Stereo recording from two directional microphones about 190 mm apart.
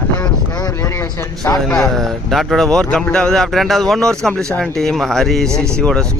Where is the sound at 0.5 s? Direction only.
20° left (ahead or behind).